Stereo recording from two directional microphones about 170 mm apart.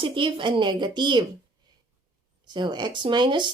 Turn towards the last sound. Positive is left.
turn(degrees=-25)  # may be behind; listen again after turning